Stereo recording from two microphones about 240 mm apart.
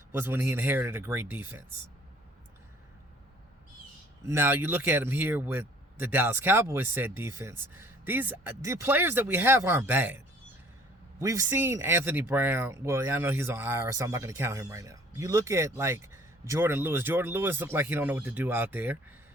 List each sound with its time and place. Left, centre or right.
0.1 s speech: centre
4.3 s speech: centre
11.2 s speech: centre